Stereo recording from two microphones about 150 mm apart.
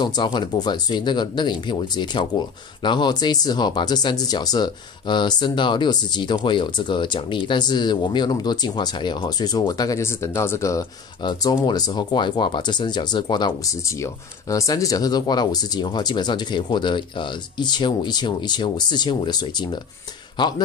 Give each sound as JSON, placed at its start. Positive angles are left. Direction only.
{"t": 0.0, "sound": "speech", "side_deg": 30}
{"t": 10.8, "sound": "speech", "side_deg": 30}